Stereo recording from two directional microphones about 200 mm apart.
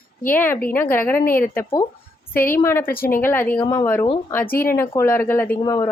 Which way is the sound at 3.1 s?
10° left (ahead or behind).